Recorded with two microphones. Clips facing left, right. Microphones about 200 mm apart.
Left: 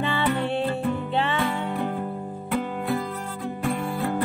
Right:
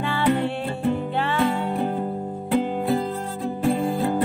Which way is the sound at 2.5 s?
30° right (ahead or behind).